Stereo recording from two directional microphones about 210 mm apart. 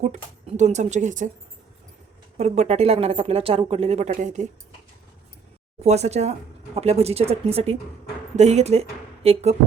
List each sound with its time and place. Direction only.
0.0 s speech: 35° right (ahead or behind)
2.4 s speech: 30° right (ahead or behind)
5.8 s a woman's voice: 30° right (ahead or behind)